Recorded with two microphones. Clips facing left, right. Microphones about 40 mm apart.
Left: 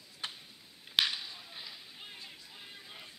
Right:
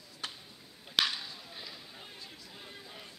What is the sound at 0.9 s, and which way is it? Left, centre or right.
Whip, centre.